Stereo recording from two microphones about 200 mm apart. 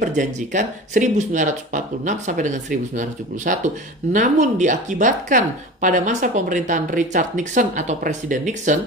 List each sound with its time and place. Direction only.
0.0 s speech: 40° right (ahead or behind)